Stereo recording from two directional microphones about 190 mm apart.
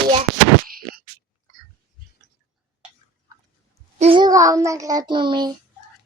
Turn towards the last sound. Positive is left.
turn(degrees=-25)  # may be behind; listen again after turning